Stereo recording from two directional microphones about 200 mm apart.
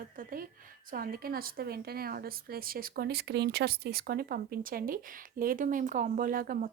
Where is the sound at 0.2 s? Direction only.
45° right (ahead or behind).